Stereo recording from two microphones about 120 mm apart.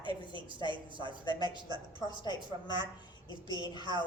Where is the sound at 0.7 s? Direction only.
40° right (ahead or behind).